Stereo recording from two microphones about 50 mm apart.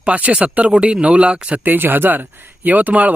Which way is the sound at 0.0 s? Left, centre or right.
Right.